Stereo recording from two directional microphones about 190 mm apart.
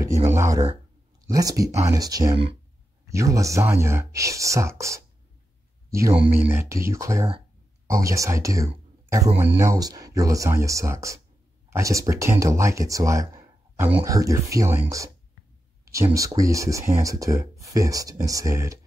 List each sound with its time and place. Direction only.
0.0 s a man's voice: 15° right (ahead or behind)